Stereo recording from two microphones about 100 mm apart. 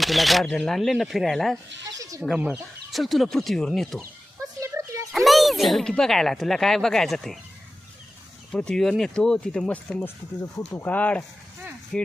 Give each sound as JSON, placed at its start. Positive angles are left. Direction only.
{"t": 0.0, "sound": "speech", "side_deg": 0}
{"t": 2.0, "sound": "chicken", "side_deg": -35}
{"t": 2.5, "sound": "speech", "side_deg": 0}
{"t": 4.6, "sound": "a sound", "side_deg": -30}
{"t": 5.1, "sound": "speech", "side_deg": 0}
{"t": 8.5, "sound": "speech", "side_deg": 5}
{"t": 11.9, "sound": "speech", "side_deg": 5}